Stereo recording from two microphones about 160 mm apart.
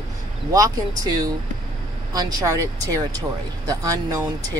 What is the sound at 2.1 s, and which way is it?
Speech, 20° right (ahead or behind).